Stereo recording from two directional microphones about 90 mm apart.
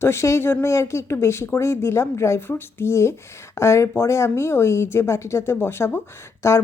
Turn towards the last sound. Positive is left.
turn(degrees=30)  # may be behind; listen again after turning